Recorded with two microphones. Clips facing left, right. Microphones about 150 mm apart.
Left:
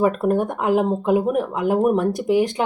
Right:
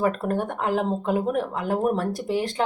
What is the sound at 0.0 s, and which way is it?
Speech, 15° left (ahead or behind).